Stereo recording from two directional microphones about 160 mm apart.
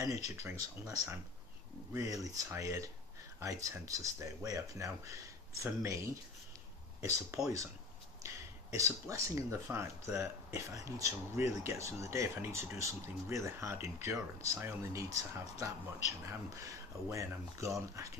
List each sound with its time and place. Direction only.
0.0 s speech: 20° right (ahead or behind)